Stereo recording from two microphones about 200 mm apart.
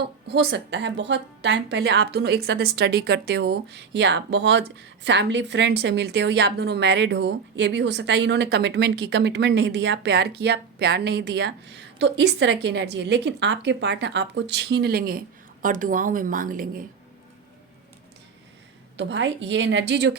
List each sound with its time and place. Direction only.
0.3 s a woman's voice: 60° right (ahead or behind); by 16.8 s 45° right (ahead or behind)
18.9 s a woman's voice: 65° right (ahead or behind)